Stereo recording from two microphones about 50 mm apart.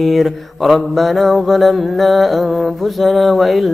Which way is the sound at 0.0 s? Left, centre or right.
Centre.